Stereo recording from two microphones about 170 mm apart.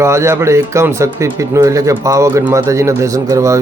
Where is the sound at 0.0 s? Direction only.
15° right (ahead or behind).